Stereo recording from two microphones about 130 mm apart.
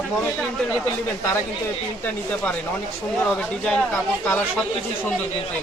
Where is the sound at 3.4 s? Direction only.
5° left (ahead or behind).